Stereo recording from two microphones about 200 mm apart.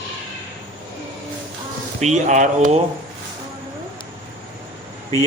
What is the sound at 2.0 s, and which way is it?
Speech, 35° right (ahead or behind).